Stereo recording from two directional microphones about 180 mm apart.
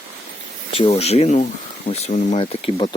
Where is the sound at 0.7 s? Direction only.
35° left (ahead or behind).